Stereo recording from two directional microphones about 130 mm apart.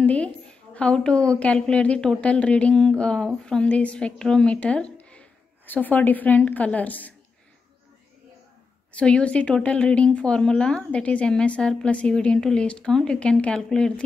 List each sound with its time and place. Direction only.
0.0 s a woman's voice: 10° left (ahead or behind)
8.9 s a woman's voice: 10° left (ahead or behind)